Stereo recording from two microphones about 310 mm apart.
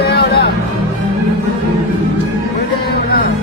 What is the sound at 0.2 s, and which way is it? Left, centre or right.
Music, left.